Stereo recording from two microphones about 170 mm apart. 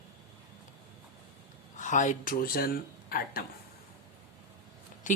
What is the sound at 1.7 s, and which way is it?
Speech, 45° left (ahead or behind).